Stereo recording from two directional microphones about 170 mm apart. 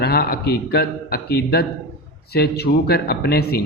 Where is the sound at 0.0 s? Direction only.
65° left (ahead or behind).